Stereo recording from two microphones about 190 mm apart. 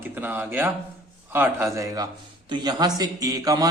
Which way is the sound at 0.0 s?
10° right (ahead or behind).